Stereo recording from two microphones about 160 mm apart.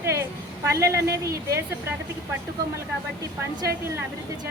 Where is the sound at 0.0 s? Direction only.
15° right (ahead or behind).